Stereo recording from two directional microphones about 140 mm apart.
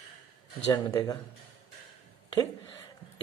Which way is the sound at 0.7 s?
25° left (ahead or behind).